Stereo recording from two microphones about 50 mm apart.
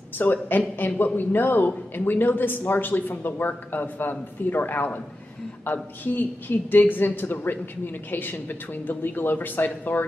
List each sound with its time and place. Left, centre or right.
0.2 s a woman's voice: left